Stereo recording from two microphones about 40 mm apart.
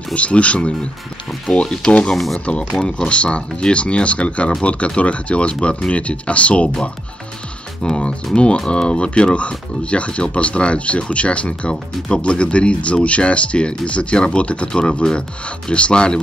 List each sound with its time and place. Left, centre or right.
0.1 s speech: left
2.1 s speech: centre
3.1 s speech: left
7.8 s speech: left